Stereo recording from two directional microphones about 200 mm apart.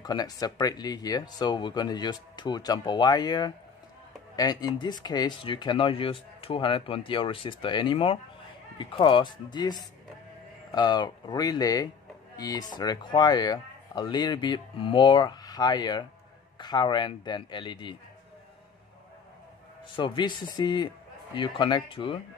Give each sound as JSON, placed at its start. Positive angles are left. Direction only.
{"t": 0.0, "sound": "speech", "side_deg": 20}
{"t": 20.0, "sound": "speech", "side_deg": 25}